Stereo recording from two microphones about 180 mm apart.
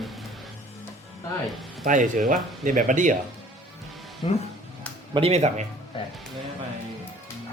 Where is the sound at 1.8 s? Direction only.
45° right (ahead or behind).